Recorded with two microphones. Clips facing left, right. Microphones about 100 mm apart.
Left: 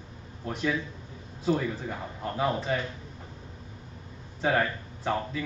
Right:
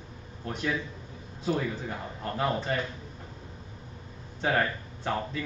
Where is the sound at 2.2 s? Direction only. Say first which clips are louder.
Left 1 dB; 5° left (ahead or behind).